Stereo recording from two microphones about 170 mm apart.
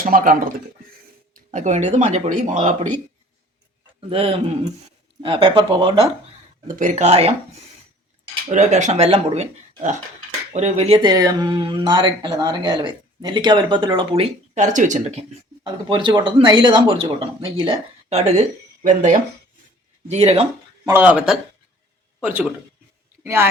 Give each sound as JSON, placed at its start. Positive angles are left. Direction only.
{"t": 0.0, "sound": "speech", "side_deg": -55}
{"t": 1.3, "sound": "speech", "side_deg": -45}
{"t": 4.1, "sound": "speech", "side_deg": -35}
{"t": 6.7, "sound": "speech", "side_deg": -45}
{"t": 8.4, "sound": "speech", "side_deg": -45}
{"t": 14.5, "sound": "speech", "side_deg": -45}
{"t": 15.6, "sound": "speech", "side_deg": -30}
{"t": 20.8, "sound": "speech", "side_deg": -10}